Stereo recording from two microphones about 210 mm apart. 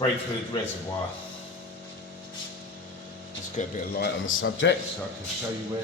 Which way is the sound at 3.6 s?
35° left (ahead or behind).